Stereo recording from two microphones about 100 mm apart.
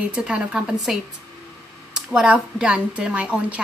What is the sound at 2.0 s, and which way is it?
A woman's voice, 5° right (ahead or behind).